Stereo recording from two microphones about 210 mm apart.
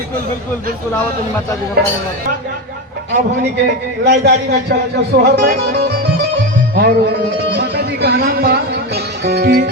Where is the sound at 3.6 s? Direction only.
55° right (ahead or behind).